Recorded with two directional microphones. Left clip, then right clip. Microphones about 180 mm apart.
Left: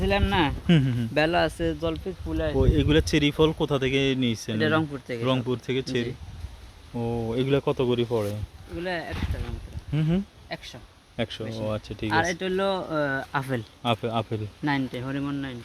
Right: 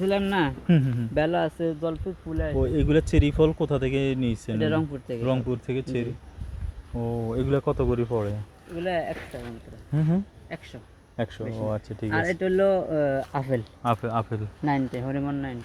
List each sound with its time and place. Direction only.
0.0 s speech: 30° left (ahead or behind)
2.6 s speech: 20° left (ahead or behind)